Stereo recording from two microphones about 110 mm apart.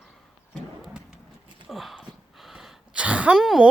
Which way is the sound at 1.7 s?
Centre (ahead or behind).